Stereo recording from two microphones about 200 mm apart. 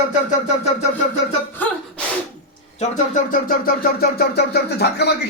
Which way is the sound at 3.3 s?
45° left (ahead or behind).